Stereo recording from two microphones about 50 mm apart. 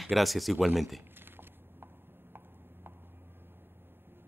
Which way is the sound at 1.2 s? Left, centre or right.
Right.